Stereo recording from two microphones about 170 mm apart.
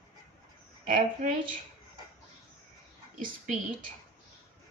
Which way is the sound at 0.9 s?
50° right (ahead or behind).